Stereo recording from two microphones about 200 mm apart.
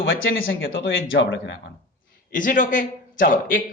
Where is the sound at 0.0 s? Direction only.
70° left (ahead or behind).